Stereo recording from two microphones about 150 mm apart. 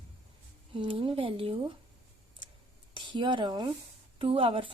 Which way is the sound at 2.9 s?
30° right (ahead or behind).